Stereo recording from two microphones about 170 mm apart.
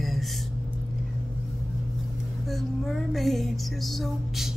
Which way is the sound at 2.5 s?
Centre (ahead or behind).